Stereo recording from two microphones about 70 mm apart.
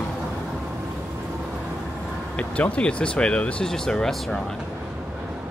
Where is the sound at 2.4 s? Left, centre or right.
Centre.